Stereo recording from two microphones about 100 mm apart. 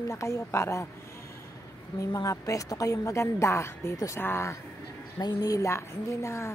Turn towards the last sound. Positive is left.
turn(degrees=30)  # may be behind; listen again after turning